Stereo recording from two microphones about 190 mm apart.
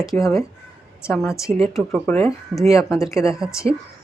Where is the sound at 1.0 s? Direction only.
5° right (ahead or behind).